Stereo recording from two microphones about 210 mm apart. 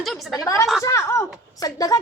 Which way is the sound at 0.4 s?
15° left (ahead or behind).